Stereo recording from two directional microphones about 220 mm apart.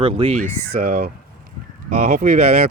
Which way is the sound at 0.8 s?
45° right (ahead or behind).